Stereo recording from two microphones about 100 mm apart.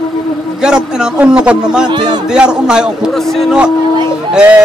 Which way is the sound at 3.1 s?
5° left (ahead or behind).